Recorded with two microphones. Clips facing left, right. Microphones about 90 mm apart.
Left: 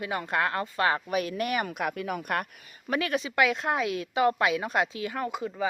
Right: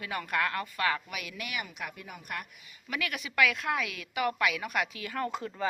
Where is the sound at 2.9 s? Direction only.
30° left (ahead or behind); by 5.6 s 10° left (ahead or behind).